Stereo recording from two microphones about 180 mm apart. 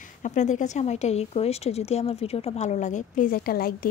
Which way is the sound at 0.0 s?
45° left (ahead or behind).